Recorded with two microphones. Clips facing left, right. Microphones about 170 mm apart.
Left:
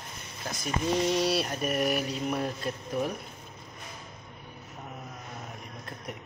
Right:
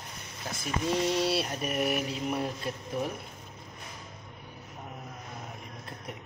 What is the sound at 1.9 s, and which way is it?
Speech, 20° right (ahead or behind).